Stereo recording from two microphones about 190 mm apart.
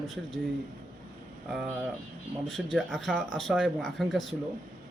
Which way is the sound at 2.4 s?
Centre (ahead or behind).